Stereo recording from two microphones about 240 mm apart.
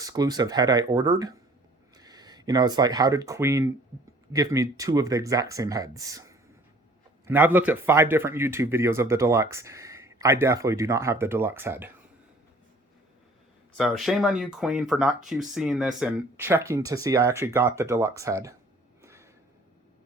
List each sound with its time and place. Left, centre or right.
0.0 s speech: centre
13.7 s speech: centre
19.0 s a sound: centre